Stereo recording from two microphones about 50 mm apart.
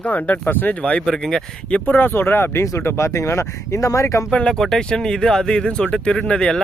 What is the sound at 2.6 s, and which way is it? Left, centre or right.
Speech, left.